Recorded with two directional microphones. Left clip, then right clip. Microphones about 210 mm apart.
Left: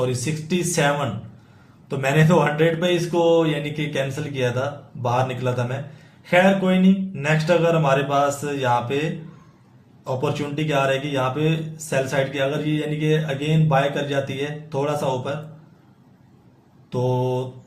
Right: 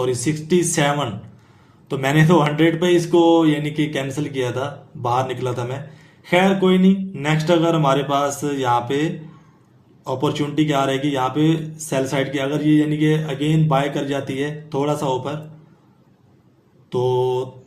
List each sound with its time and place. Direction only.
0.0 s speech: 40° right (ahead or behind)
10.2 s speech: 40° right (ahead or behind)
16.9 s speech: 40° right (ahead or behind)